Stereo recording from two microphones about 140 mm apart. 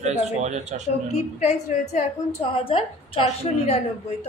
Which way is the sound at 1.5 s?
60° left (ahead or behind).